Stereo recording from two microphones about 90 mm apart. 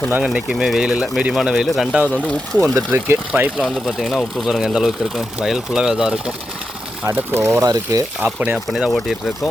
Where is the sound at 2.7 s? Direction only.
25° right (ahead or behind).